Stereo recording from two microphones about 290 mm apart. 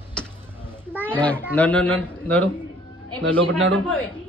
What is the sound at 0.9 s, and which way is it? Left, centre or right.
Speech, centre.